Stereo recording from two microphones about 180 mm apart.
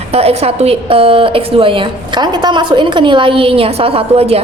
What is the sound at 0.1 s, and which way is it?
A woman's voice, 35° right (ahead or behind).